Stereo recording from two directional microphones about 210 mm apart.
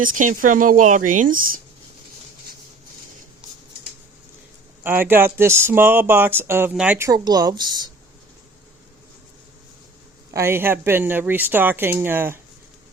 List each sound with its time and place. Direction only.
0.0 s speech: 40° right (ahead or behind)
4.8 s speech: 10° right (ahead or behind)
10.3 s speech: 10° right (ahead or behind)